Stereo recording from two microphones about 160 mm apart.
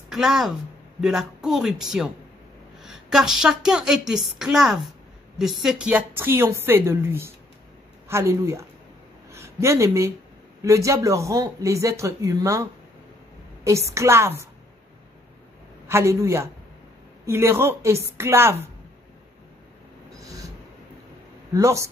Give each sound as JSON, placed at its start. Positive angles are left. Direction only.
{"t": 0.1, "sound": "a woman's voice", "side_deg": 0}
{"t": 13.7, "sound": "a woman's voice", "side_deg": -20}
{"t": 15.9, "sound": "a woman's voice", "side_deg": -15}
{"t": 20.1, "sound": "a sound", "side_deg": -20}
{"t": 21.5, "sound": "speech", "side_deg": -20}